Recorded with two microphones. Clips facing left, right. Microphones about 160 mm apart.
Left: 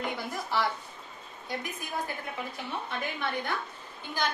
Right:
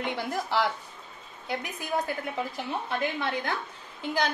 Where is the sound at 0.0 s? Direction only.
70° right (ahead or behind).